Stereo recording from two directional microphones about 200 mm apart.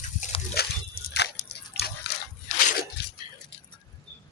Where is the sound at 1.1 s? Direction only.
55° left (ahead or behind).